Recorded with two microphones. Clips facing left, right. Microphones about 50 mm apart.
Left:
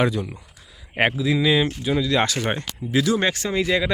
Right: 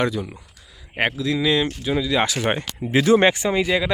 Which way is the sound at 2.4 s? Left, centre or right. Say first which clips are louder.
Right 3 dB; centre.